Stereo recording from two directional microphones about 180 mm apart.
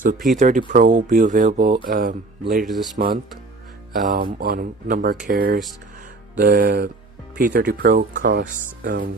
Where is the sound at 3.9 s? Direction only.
50° right (ahead or behind).